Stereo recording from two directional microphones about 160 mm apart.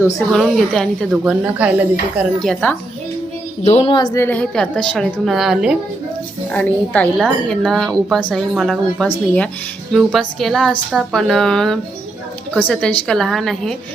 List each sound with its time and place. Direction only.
0.3 s speech: centre (ahead or behind)
1.2 s a woman's voice: 10° right (ahead or behind)
2.1 s speech: centre (ahead or behind)
3.6 s a woman's voice: 40° left (ahead or behind)
4.1 s a woman's voice: 15° left (ahead or behind); by 5.7 s 5° right (ahead or behind)
6.5 s a woman's voice: 10° left (ahead or behind)